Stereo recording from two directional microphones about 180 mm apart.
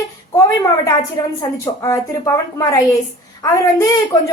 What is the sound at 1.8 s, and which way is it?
A woman's voice, 20° left (ahead or behind).